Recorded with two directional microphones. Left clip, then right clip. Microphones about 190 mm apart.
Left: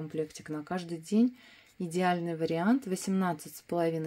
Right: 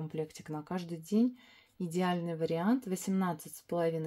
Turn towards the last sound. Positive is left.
turn(degrees=20)  # may be behind; listen again after turning